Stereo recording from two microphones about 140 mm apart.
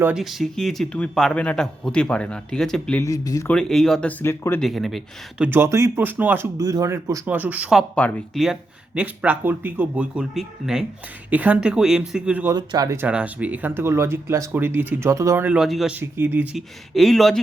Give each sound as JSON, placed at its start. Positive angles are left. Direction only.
{"t": 0.0, "sound": "a man's voice", "side_deg": -5}
{"t": 3.0, "sound": "speech", "side_deg": 25}
{"t": 3.5, "sound": "a man's voice", "side_deg": 5}
{"t": 4.2, "sound": "speech", "side_deg": 15}
{"t": 4.6, "sound": "a man's voice", "side_deg": 0}
{"t": 5.5, "sound": "speech", "side_deg": -20}
{"t": 6.6, "sound": "speech", "side_deg": -25}
{"t": 9.0, "sound": "speech", "side_deg": -10}
{"t": 12.5, "sound": "speech", "side_deg": -25}
{"t": 13.0, "sound": "speech", "side_deg": -10}
{"t": 15.5, "sound": "a man's voice", "side_deg": 0}
{"t": 16.0, "sound": "speech", "side_deg": -15}
{"t": 16.6, "sound": "a man's voice", "side_deg": 0}